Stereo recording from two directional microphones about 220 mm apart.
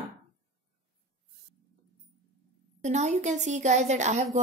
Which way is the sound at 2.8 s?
30° right (ahead or behind).